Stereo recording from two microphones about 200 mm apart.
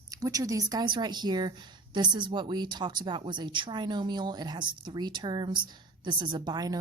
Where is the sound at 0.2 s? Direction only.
15° right (ahead or behind).